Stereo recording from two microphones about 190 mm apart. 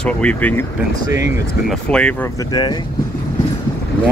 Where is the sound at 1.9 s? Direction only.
5° left (ahead or behind).